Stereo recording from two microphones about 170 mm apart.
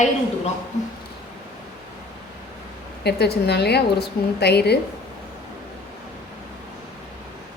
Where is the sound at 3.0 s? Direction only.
75° left (ahead or behind).